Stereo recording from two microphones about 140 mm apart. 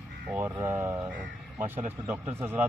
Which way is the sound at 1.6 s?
60° right (ahead or behind).